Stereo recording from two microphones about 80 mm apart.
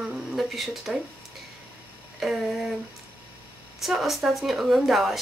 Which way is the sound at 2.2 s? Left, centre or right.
Centre.